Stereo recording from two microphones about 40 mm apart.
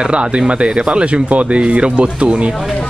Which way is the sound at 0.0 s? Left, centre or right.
Right.